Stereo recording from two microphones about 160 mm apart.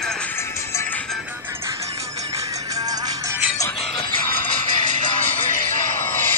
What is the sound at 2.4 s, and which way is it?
Music, 20° right (ahead or behind).